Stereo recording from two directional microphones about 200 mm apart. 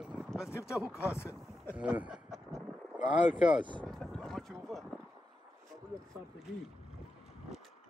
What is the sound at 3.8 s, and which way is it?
Boat, centre (ahead or behind).